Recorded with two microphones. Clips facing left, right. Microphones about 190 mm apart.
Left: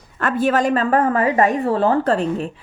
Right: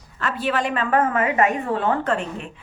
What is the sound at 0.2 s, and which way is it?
A woman's voice, 50° left (ahead or behind).